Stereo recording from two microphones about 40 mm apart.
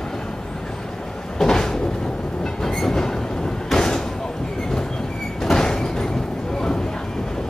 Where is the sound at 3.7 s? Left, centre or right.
Centre.